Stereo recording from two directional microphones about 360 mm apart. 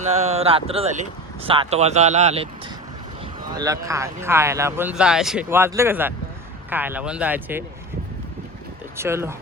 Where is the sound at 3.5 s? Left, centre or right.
Centre.